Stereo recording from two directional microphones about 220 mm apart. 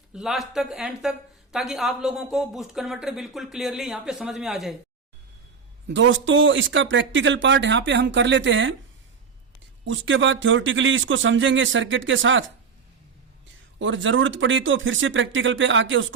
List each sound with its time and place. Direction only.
0.1 s speech: centre (ahead or behind)
5.9 s speech: 60° right (ahead or behind)
9.8 s speech: 60° right (ahead or behind)
13.7 s speech: 60° right (ahead or behind)